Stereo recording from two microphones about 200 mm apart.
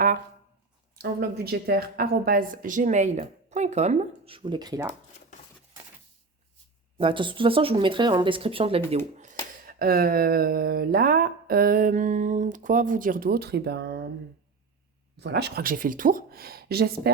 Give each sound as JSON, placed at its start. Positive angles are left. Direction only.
{"t": 0.9, "sound": "a woman's voice", "side_deg": -50}
{"t": 7.0, "sound": "speech", "side_deg": -25}
{"t": 15.1, "sound": "speech", "side_deg": -55}